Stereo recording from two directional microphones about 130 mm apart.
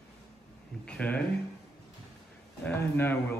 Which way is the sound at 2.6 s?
15° left (ahead or behind).